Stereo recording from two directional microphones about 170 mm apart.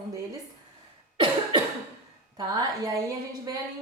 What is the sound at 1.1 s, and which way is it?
Cough, 25° right (ahead or behind).